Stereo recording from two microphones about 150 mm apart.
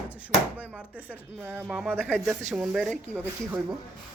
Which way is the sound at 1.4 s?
15° right (ahead or behind).